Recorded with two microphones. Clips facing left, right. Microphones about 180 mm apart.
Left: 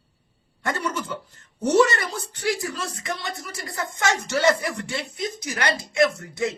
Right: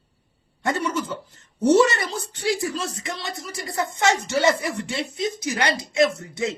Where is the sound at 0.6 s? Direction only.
25° right (ahead or behind).